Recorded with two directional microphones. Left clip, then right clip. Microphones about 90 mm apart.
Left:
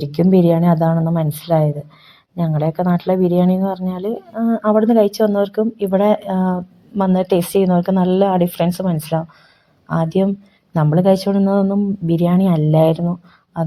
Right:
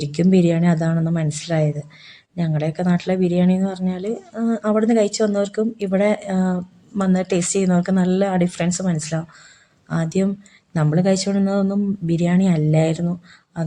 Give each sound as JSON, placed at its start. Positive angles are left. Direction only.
{"t": 0.2, "sound": "a woman's voice", "side_deg": 20}
{"t": 4.4, "sound": "a woman's voice", "side_deg": 5}
{"t": 6.9, "sound": "a woman's voice", "side_deg": 20}
{"t": 11.3, "sound": "speech", "side_deg": 20}
{"t": 12.0, "sound": "a woman's voice", "side_deg": 25}